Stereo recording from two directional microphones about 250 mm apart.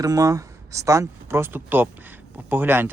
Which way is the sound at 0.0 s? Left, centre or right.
Centre.